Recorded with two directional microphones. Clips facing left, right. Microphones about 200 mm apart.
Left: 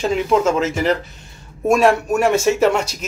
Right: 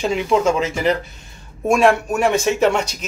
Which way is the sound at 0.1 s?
Centre (ahead or behind).